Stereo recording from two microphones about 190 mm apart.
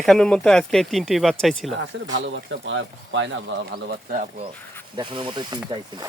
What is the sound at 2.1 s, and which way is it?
Speech, 70° right (ahead or behind).